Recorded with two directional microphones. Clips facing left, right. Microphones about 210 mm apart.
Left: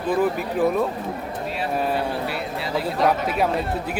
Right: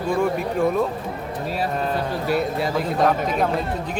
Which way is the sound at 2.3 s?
45° right (ahead or behind).